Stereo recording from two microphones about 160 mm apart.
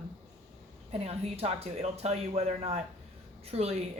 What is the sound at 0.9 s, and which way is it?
Speech, 40° right (ahead or behind).